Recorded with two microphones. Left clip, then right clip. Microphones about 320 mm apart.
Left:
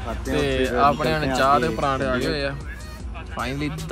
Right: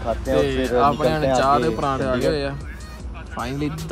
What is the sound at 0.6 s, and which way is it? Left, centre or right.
Speech, centre.